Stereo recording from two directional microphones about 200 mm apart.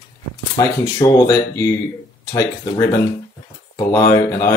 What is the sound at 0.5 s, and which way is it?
Speech, 25° left (ahead or behind).